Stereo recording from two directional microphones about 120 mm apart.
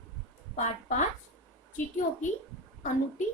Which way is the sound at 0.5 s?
80° left.